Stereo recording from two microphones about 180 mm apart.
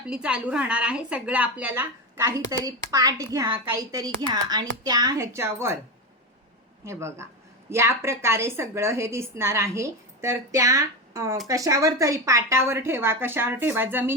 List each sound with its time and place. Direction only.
0.1 s a woman's voice: 5° right (ahead or behind)
6.8 s a woman's voice: 15° right (ahead or behind)